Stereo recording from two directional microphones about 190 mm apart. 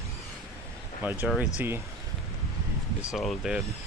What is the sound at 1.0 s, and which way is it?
Speech, 10° right (ahead or behind).